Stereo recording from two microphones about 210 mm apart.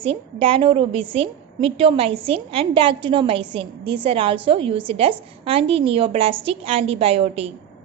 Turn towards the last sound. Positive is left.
turn(degrees=-30)  # may be behind; listen again after turning